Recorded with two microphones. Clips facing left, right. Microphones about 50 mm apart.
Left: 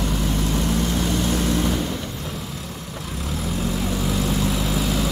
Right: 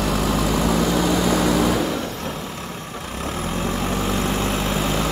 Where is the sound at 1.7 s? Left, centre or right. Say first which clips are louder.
Right 4 dB; right.